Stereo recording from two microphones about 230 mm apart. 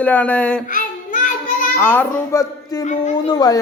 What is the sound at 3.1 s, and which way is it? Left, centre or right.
Speech, centre.